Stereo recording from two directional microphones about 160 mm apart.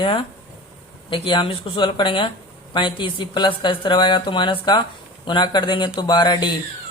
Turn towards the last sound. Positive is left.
turn(degrees=30)  # may be behind; listen again after turning